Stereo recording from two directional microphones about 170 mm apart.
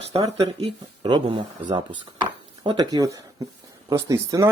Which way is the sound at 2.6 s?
20° right (ahead or behind).